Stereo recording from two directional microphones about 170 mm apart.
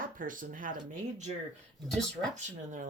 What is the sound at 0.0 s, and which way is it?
Speech, 55° right (ahead or behind).